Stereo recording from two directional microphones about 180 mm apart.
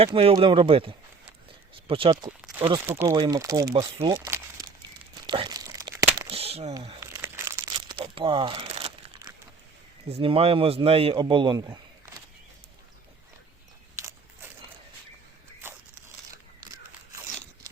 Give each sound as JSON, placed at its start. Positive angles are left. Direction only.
{"t": 0.0, "sound": "a man's voice", "side_deg": -30}
{"t": 2.8, "sound": "a man's voice", "side_deg": -15}
{"t": 4.3, "sound": "crumpling", "side_deg": -10}
{"t": 5.2, "sound": "crumpling", "side_deg": -25}
{"t": 6.3, "sound": "a sound", "side_deg": -35}
{"t": 7.0, "sound": "crumpling", "side_deg": -15}
{"t": 7.6, "sound": "crumpling", "side_deg": -25}
{"t": 10.1, "sound": "a man's voice", "side_deg": -30}